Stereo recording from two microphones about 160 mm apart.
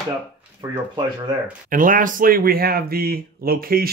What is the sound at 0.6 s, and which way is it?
Speech, 25° right (ahead or behind).